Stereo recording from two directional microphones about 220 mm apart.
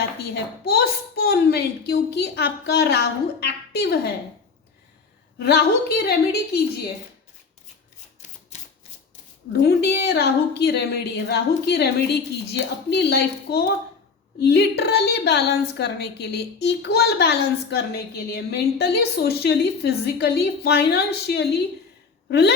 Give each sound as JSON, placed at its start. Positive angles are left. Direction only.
{"t": 0.2, "sound": "a woman's voice", "side_deg": 45}
{"t": 5.4, "sound": "a woman's voice", "side_deg": 45}
{"t": 8.5, "sound": "typewriter", "side_deg": 30}
{"t": 9.5, "sound": "a woman's voice", "side_deg": 50}